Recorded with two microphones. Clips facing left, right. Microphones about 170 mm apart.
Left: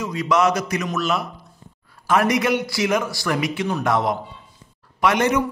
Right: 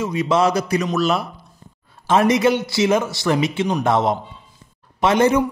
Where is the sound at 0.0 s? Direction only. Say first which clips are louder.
Right 2 dB; 25° right (ahead or behind).